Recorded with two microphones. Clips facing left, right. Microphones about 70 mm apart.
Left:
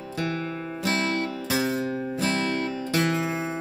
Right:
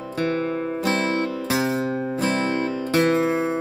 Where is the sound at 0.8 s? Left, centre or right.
Right.